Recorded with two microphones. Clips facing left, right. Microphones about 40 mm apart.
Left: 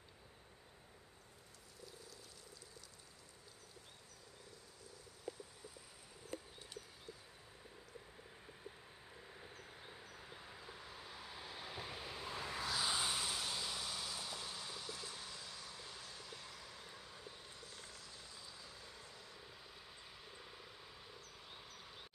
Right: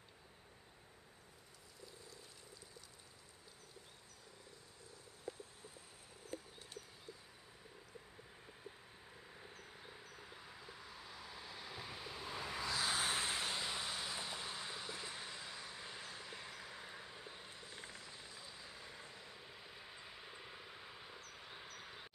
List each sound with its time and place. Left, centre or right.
9.3 s vehicle: centre
12.8 s vehicle: right
21.3 s a sound: centre